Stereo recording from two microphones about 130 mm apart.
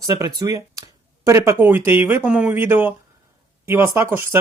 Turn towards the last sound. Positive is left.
turn(degrees=-20)  # may be behind; listen again after turning